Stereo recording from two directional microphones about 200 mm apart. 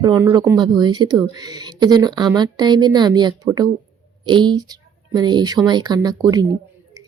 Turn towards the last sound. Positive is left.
turn(degrees=-20)  # may be behind; listen again after turning